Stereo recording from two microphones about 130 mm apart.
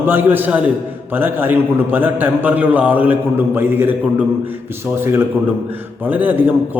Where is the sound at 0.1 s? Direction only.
15° right (ahead or behind).